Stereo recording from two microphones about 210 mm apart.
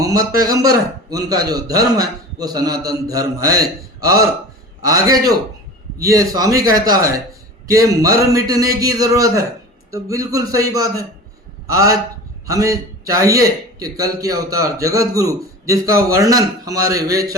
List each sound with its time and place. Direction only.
0.0 s a man's voice: 15° right (ahead or behind)